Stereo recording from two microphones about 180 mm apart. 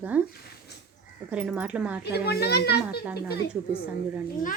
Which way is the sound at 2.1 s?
60° left (ahead or behind).